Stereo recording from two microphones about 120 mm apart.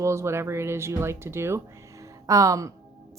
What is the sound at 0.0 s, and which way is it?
A woman's voice, 25° right (ahead or behind).